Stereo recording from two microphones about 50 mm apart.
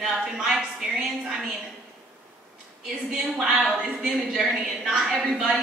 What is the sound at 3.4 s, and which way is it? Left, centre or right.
Speech, centre.